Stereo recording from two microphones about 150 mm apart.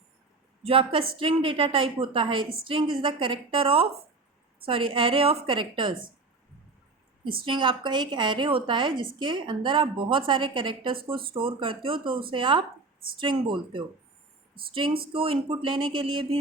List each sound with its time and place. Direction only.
0.6 s a woman's voice: 35° right (ahead or behind)
7.4 s a woman's voice: 35° right (ahead or behind)